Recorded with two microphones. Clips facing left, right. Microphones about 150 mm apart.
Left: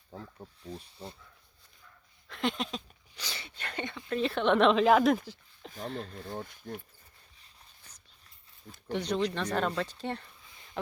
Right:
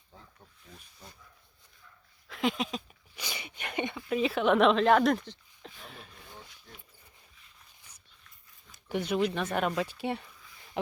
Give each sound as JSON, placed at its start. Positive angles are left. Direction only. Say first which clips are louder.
{"t": 0.1, "sound": "speech", "louder": "left 10 dB", "side_deg": 40}
{"t": 2.2, "sound": "a sound", "louder": "right 2 dB", "side_deg": 0}
{"t": 5.8, "sound": "speech", "louder": "left 17 dB", "side_deg": 90}
{"t": 8.7, "sound": "speech", "louder": "right 1 dB", "side_deg": -5}